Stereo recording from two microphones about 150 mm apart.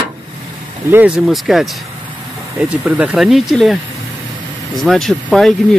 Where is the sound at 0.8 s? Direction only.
10° right (ahead or behind).